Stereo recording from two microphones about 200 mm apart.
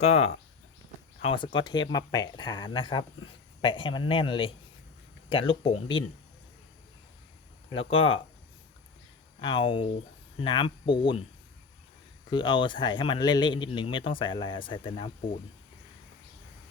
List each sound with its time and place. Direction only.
0.0 s a man's voice: 30° left (ahead or behind)
7.7 s a man's voice: 25° left (ahead or behind)
9.4 s a man's voice: 25° left (ahead or behind)
12.3 s a man's voice: 25° left (ahead or behind)